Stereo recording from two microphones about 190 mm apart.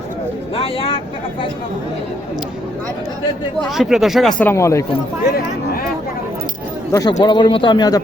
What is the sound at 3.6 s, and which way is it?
Speech, centre (ahead or behind).